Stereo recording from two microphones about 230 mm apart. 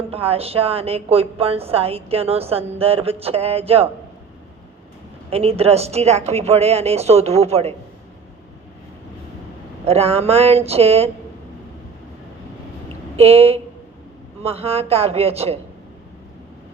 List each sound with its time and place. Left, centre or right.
0.1 s a woman's voice: right
5.3 s a woman's voice: right
9.8 s a woman's voice: right
12.9 s a sound: right
14.4 s a woman's voice: right